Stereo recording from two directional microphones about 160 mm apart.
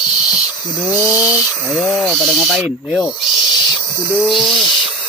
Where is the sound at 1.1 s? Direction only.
10° right (ahead or behind).